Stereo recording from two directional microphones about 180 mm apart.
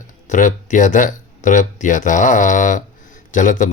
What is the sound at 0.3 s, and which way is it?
Speech, 45° left (ahead or behind).